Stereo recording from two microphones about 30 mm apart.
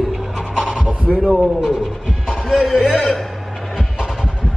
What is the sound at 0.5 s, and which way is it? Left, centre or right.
Pant, right.